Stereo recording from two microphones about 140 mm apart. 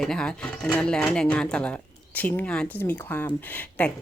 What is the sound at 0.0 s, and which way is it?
A woman's voice, 5° left (ahead or behind).